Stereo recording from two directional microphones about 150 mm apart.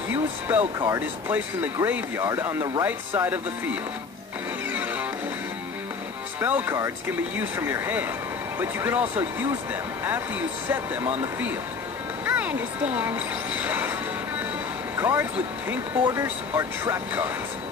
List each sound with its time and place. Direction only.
0.1 s speech: 10° right (ahead or behind)
6.4 s speech: 10° right (ahead or behind)
12.3 s speech: 10° right (ahead or behind)
15.0 s speech: 15° right (ahead or behind)
16.0 s speech: 25° right (ahead or behind)